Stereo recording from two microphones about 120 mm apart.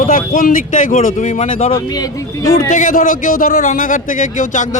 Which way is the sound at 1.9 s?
35° left (ahead or behind).